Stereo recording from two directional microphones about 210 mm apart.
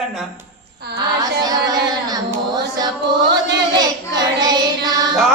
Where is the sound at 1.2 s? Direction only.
20° right (ahead or behind).